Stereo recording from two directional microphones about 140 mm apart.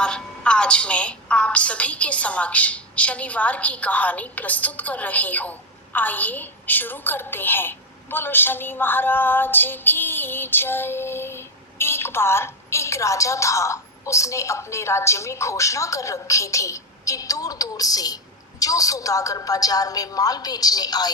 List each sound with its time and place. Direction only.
0.0 s a woman's voice: 5° left (ahead or behind); by 21.1 s 30° left (ahead or behind)